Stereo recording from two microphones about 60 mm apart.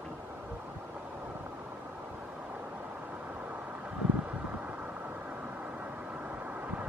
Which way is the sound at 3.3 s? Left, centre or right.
Right.